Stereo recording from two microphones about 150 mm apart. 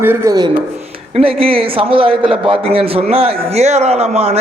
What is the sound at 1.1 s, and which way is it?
A man's voice, 40° right (ahead or behind).